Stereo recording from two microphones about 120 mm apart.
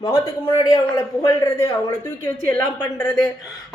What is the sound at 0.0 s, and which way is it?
A woman's voice, 25° left (ahead or behind).